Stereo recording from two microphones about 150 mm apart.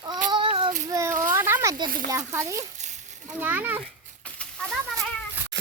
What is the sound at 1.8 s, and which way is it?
Speech, 70° right (ahead or behind).